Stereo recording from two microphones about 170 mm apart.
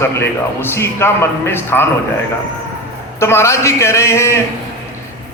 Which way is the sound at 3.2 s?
15° left (ahead or behind).